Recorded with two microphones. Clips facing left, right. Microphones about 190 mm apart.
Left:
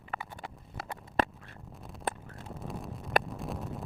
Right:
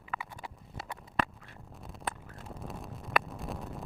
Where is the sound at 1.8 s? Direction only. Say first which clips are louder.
Left 3 dB; centre (ahead or behind).